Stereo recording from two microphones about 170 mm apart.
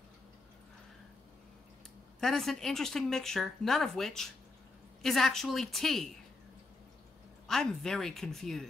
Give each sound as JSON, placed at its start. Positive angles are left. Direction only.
{"t": 2.1, "sound": "speech", "side_deg": 0}
{"t": 7.4, "sound": "speech", "side_deg": 5}